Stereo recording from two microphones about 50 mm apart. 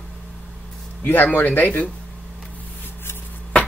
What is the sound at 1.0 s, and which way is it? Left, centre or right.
Speech, left.